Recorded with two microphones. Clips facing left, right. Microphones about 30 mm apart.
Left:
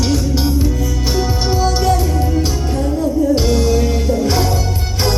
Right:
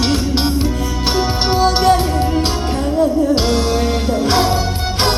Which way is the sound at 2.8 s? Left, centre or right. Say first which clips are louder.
Right 1 dB; right.